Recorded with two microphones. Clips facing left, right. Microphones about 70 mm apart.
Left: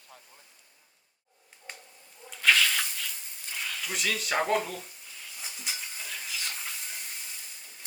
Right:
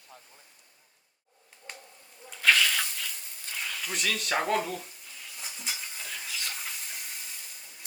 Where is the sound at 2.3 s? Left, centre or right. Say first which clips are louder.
Even; centre.